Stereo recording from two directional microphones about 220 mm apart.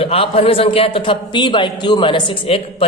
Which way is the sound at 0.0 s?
25° left (ahead or behind).